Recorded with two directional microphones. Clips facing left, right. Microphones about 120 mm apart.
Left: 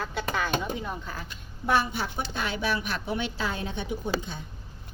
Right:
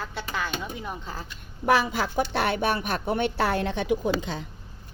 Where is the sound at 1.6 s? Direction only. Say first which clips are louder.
Right 3 dB; 90° right.